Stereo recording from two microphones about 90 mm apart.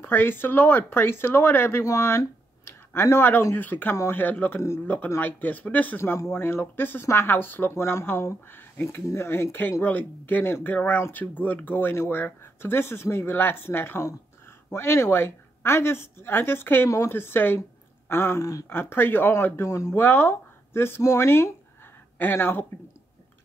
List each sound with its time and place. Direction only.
0.0 s speech: 25° left (ahead or behind)
3.9 s speech: 35° left (ahead or behind)
4.2 s speech: 20° left (ahead or behind)
17.6 s a sound: 25° left (ahead or behind)
18.4 s speech: 40° left (ahead or behind)
18.7 s speech: 25° left (ahead or behind)
19.9 s speech: 20° left (ahead or behind)